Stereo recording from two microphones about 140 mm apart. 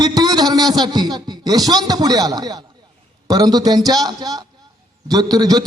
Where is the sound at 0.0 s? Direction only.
30° right (ahead or behind).